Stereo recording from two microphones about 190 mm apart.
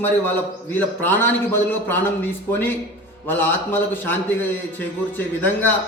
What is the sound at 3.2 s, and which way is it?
Speech, 10° left (ahead or behind).